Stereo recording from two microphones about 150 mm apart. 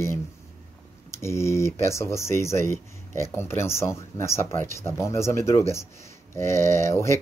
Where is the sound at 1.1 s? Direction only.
20° left (ahead or behind).